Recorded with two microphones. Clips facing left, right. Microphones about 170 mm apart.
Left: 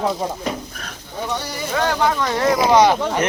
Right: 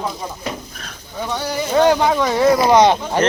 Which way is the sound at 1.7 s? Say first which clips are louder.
Right 5 dB; 20° right (ahead or behind).